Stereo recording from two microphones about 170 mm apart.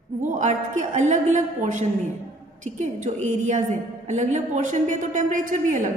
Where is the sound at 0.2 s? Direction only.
45° right (ahead or behind).